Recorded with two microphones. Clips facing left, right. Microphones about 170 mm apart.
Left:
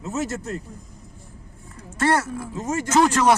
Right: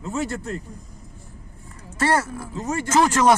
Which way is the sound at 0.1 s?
40° left (ahead or behind).